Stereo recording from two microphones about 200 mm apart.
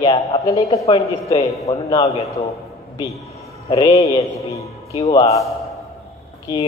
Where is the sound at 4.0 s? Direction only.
15° left (ahead or behind).